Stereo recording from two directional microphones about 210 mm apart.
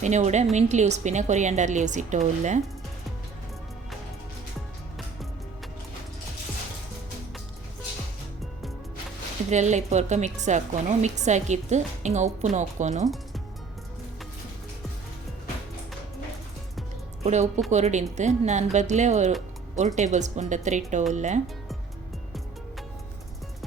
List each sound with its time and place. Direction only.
0.0 s speech: 35° right (ahead or behind)
9.5 s speech: 35° right (ahead or behind)
17.2 s speech: 30° right (ahead or behind)